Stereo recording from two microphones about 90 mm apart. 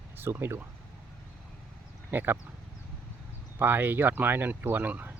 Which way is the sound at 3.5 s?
25° right (ahead or behind).